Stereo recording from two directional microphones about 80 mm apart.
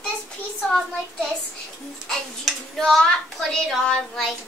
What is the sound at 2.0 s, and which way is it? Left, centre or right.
A child's voice, centre.